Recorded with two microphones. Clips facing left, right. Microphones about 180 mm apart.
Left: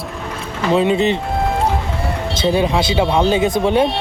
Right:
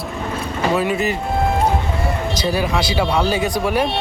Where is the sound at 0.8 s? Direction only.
25° left (ahead or behind).